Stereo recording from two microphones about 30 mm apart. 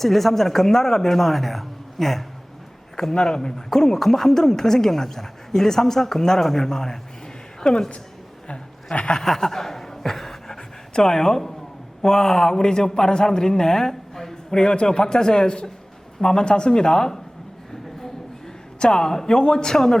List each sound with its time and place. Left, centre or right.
0.0 s speech: centre
2.9 s a man's voice: left
8.4 s a sound: left
9.2 s chuckle: centre
11.0 s a man's voice: centre
18.8 s a man's voice: left